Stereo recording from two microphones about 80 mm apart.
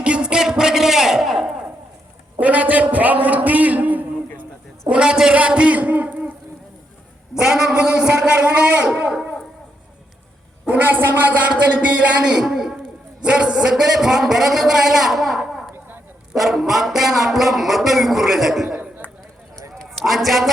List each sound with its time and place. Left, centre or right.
0.0 s a sound: centre
2.4 s a man's voice: centre
4.9 s a man's voice: centre
7.3 s a man's voice: centre
10.7 s a man's voice: right
12.2 s a man's voice: centre
19.8 s a man's voice: centre